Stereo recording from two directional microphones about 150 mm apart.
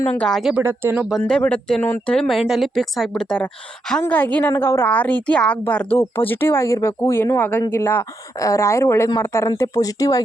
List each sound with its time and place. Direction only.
0.2 s speech: centre (ahead or behind)
0.5 s speech: 15° right (ahead or behind)
1.3 s a woman's voice: 10° left (ahead or behind)